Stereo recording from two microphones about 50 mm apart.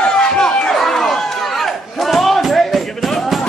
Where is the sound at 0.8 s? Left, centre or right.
Centre.